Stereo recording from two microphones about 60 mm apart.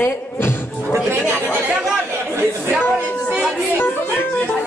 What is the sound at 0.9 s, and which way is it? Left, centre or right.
Speech, right.